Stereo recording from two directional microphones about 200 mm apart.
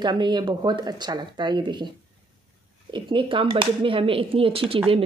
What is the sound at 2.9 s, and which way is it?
A woman's voice, 25° right (ahead or behind).